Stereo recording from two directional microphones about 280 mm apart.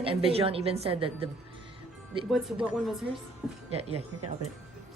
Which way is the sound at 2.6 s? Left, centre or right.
Centre.